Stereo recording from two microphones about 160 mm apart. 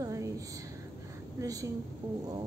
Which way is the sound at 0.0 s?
20° right (ahead or behind).